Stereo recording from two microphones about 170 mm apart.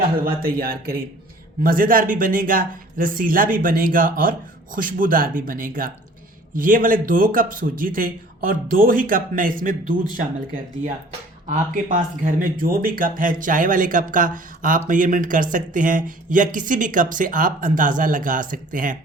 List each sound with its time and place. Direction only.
0.2 s speech: 60° right (ahead or behind)